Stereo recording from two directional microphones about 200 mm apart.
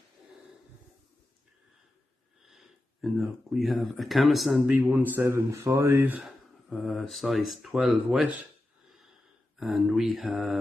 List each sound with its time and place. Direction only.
2.4 s speech: centre (ahead or behind)
6.7 s speech: centre (ahead or behind)
9.6 s speech: centre (ahead or behind)